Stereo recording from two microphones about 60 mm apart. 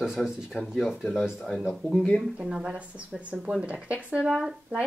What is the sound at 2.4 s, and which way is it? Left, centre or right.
Speech, centre.